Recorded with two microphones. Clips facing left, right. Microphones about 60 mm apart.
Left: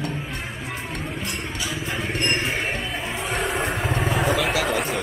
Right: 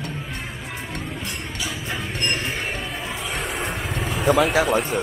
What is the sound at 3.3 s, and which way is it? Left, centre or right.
Vehicle, centre.